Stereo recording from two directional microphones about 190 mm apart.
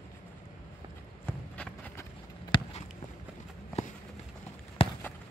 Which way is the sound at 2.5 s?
25° left (ahead or behind).